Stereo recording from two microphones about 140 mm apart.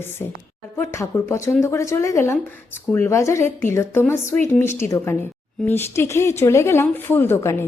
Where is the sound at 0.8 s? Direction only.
20° left (ahead or behind).